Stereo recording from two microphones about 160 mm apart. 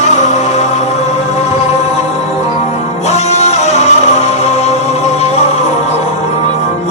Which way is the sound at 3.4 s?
45° left (ahead or behind).